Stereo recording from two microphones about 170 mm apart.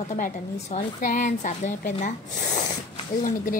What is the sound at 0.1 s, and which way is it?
Speech, 45° left (ahead or behind).